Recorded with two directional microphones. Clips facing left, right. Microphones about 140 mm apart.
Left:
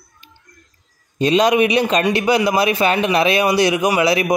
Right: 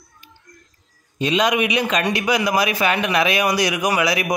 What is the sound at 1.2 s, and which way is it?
A man's voice, 35° left (ahead or behind).